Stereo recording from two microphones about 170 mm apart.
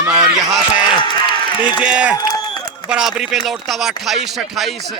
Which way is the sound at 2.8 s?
5° right (ahead or behind).